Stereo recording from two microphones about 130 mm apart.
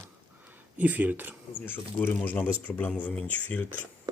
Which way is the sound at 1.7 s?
15° left (ahead or behind).